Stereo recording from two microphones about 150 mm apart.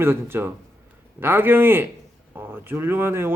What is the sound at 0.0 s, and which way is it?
Speech, 15° right (ahead or behind).